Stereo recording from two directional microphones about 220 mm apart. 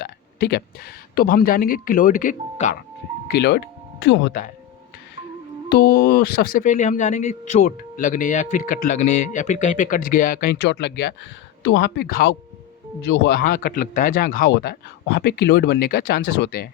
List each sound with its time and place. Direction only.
0.0 s a sound: 45° left (ahead or behind)
1.1 s speech: 45° left (ahead or behind)
3.2 s speech: 50° left (ahead or behind)
4.0 s speech: 60° left (ahead or behind)
5.6 s speech: 45° left (ahead or behind)